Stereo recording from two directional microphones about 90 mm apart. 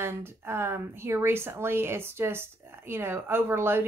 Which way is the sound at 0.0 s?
30° right (ahead or behind).